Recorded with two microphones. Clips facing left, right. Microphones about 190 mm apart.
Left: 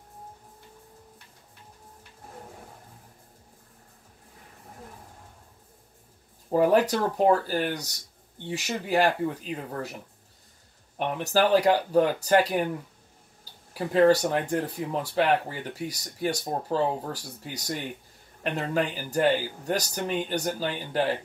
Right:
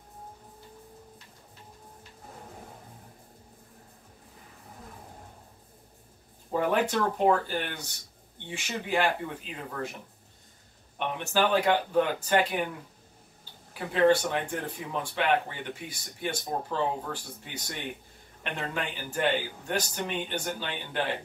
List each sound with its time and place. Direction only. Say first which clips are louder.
6.5 s speech: left 5 dB; 40° left (ahead or behind)
11.0 s speech: left 3 dB; 40° left (ahead or behind)